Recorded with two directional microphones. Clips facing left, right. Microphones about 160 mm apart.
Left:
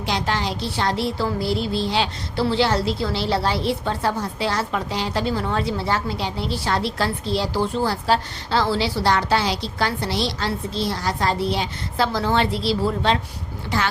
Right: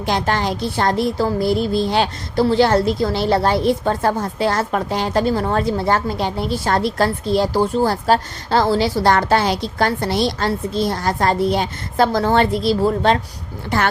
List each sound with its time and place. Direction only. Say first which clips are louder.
0.0 s speech: right 4 dB; 50° right (ahead or behind)